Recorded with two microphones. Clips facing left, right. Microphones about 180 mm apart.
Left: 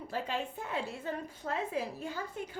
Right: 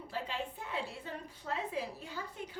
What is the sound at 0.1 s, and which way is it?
A woman's voice, 45° left (ahead or behind).